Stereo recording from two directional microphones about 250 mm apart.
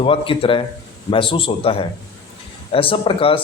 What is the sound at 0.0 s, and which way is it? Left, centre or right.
A man's voice, left.